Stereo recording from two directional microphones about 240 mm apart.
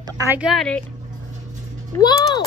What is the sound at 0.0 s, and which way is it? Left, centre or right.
Speech, centre.